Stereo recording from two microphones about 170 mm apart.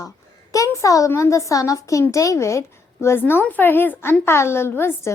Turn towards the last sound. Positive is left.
turn(degrees=15)  # may be behind; listen again after turning